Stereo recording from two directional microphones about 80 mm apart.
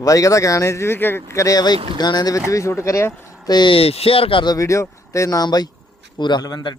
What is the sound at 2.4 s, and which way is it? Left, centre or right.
Speech, left.